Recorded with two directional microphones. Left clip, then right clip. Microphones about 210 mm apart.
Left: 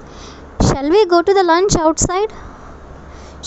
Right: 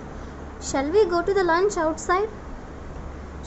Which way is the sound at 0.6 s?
45° left (ahead or behind).